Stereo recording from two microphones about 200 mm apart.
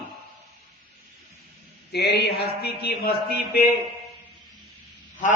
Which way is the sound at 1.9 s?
55° left (ahead or behind).